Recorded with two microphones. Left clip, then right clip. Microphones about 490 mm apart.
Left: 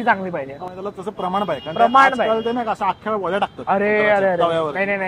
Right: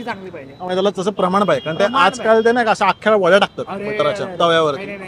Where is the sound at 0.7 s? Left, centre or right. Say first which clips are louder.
Right 11 dB; right.